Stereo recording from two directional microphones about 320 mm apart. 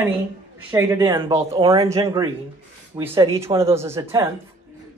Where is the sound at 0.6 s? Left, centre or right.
Centre.